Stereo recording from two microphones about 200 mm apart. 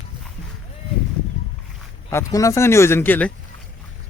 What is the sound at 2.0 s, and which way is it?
Speech, 15° left (ahead or behind).